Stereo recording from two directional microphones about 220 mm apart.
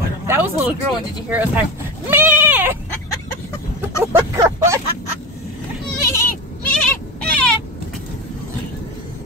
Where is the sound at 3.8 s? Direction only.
10° right (ahead or behind).